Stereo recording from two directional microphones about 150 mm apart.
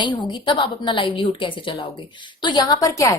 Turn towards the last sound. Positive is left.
turn(degrees=25)  # may be behind; listen again after turning